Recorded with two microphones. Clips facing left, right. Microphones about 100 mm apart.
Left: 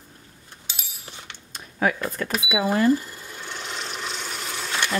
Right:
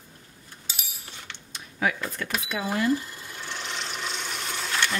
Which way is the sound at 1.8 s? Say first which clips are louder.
Left 4 dB; 40° left (ahead or behind).